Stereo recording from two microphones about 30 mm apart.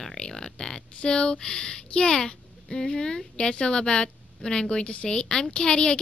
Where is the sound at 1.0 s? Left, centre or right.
Left.